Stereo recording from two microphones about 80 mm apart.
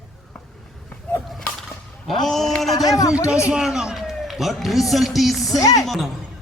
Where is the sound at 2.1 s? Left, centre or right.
Centre.